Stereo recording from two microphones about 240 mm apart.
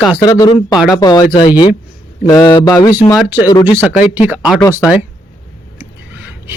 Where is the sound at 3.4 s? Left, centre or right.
Centre.